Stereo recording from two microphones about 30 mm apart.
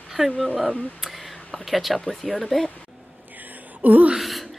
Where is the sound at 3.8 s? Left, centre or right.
Right.